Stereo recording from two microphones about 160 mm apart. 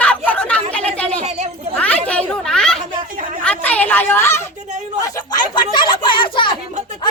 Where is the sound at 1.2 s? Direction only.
45° right (ahead or behind).